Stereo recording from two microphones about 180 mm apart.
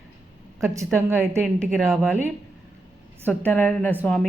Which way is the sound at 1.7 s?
Centre (ahead or behind).